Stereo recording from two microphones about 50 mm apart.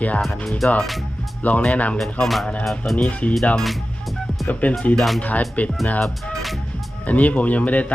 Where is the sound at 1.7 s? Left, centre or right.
Left.